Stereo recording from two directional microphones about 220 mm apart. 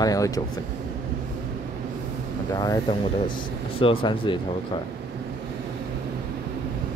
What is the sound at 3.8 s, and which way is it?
Speech, 20° left (ahead or behind).